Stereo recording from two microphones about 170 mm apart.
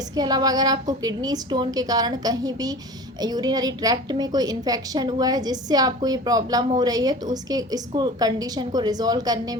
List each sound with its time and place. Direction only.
0.2 s a woman's voice: 25° right (ahead or behind)